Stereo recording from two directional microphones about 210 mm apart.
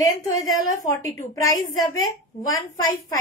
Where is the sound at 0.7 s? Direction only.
15° left (ahead or behind).